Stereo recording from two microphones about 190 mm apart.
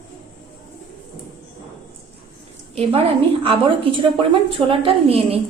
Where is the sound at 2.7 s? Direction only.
30° right (ahead or behind).